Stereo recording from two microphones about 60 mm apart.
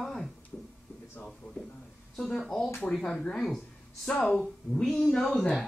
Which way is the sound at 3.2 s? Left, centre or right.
Centre.